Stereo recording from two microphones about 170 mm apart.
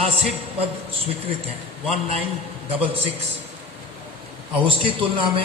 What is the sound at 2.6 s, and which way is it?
Speech, 35° right (ahead or behind).